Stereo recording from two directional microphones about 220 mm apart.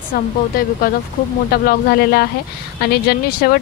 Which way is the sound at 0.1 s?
45° left (ahead or behind).